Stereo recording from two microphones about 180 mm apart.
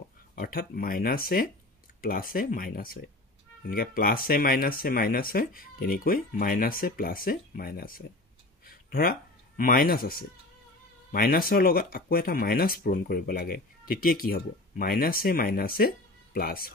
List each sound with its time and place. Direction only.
0.4 s speech: 55° left (ahead or behind)